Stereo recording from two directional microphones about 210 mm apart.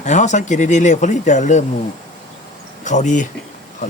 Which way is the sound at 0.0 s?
35° left (ahead or behind).